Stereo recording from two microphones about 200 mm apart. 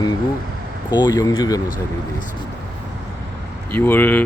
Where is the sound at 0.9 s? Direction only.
20° left (ahead or behind).